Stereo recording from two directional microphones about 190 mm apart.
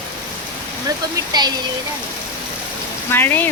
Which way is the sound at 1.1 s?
20° right (ahead or behind).